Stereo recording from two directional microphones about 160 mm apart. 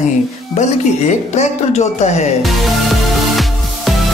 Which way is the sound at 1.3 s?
45° left (ahead or behind).